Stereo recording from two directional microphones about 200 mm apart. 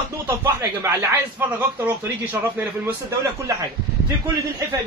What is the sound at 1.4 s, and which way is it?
A man's voice, 10° right (ahead or behind).